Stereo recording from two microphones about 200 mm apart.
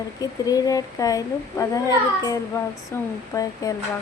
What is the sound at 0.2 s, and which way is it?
A woman's voice, 20° left (ahead or behind).